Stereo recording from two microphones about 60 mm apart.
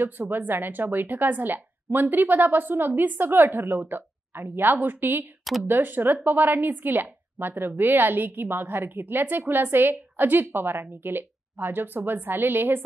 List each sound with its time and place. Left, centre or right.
0.0 s a woman's voice: right
5.4 s a sound: centre
5.7 s a woman's voice: right